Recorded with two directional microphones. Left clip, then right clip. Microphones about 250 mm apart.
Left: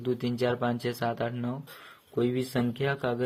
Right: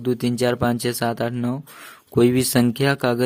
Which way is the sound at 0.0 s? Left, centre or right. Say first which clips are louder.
Right 8 dB; right.